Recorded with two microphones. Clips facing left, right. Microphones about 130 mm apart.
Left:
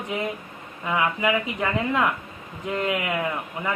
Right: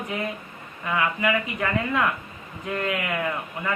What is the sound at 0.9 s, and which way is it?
A man's voice, 20° left (ahead or behind).